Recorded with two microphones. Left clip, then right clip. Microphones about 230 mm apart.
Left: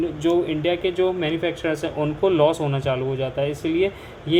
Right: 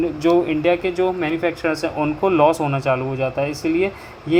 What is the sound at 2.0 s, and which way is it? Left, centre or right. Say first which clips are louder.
Speech: right 2 dB; right.